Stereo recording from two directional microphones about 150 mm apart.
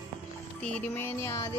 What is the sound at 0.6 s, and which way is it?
Music, 15° left (ahead or behind).